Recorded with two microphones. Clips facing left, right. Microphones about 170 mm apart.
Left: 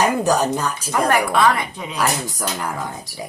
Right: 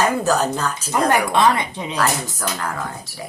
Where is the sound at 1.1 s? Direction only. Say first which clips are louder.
Even; 20° right (ahead or behind).